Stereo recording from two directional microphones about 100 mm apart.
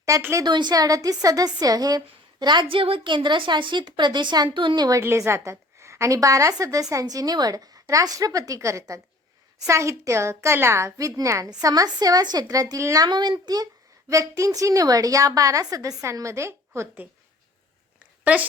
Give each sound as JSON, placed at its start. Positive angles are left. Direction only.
{"t": 0.2, "sound": "a woman's voice", "side_deg": -25}
{"t": 0.4, "sound": "a woman's voice", "side_deg": -45}
{"t": 4.9, "sound": "a woman's voice", "side_deg": -30}
{"t": 13.1, "sound": "a woman's voice", "side_deg": -50}